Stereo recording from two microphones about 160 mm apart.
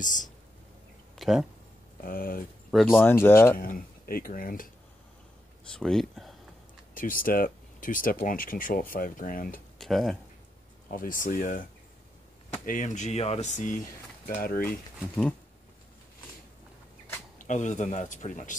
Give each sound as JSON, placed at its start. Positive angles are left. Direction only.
{"t": 0.0, "sound": "speech", "side_deg": 55}
{"t": 1.1, "sound": "speech", "side_deg": 0}
{"t": 2.0, "sound": "speech", "side_deg": 65}
{"t": 2.7, "sound": "speech", "side_deg": 0}
{"t": 3.0, "sound": "speech", "side_deg": 15}
{"t": 3.5, "sound": "speech", "side_deg": 65}
{"t": 5.7, "sound": "speech", "side_deg": 5}
{"t": 6.9, "sound": "speech", "side_deg": 60}
{"t": 9.8, "sound": "speech", "side_deg": 0}
{"t": 10.9, "sound": "speech", "side_deg": 60}
{"t": 12.6, "sound": "speech", "side_deg": 50}
{"t": 17.4, "sound": "speech", "side_deg": 50}